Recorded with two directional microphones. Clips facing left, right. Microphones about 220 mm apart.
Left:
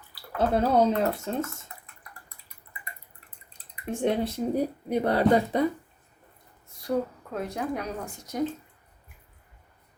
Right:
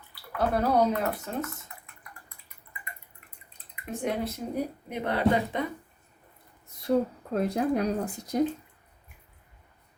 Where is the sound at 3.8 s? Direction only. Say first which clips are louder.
Left 4 dB; 30° left (ahead or behind).